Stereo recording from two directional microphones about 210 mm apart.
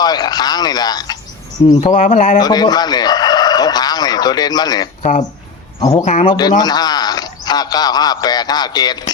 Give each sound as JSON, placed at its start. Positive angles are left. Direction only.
{"t": 0.0, "sound": "speech", "side_deg": 20}
{"t": 1.9, "sound": "speech", "side_deg": 35}
{"t": 2.4, "sound": "a man's voice", "side_deg": 20}
{"t": 6.1, "sound": "speech", "side_deg": 35}
{"t": 6.6, "sound": "speech", "side_deg": 20}